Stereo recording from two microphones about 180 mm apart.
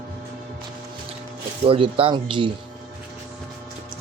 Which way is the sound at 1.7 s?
30° right (ahead or behind).